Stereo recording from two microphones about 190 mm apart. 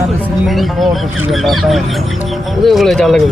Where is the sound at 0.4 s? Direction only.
Centre (ahead or behind).